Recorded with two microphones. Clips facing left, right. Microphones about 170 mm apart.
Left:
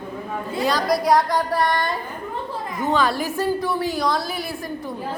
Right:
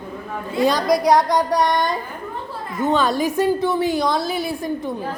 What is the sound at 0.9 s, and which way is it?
Speech, centre (ahead or behind).